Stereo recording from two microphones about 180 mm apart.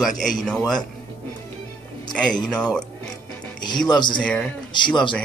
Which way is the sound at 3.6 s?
25° left (ahead or behind).